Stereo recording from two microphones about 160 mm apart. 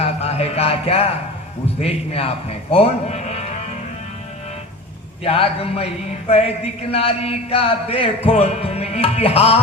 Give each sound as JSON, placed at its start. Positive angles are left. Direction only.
{"t": 0.0, "sound": "a sound", "side_deg": 40}
{"t": 1.6, "sound": "music", "side_deg": 40}
{"t": 5.2, "sound": "music", "side_deg": 35}